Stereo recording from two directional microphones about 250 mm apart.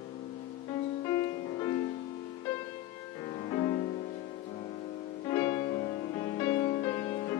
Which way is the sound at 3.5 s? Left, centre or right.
Centre.